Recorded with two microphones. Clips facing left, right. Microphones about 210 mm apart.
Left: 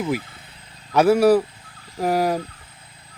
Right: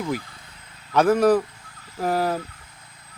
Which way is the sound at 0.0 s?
25° left (ahead or behind).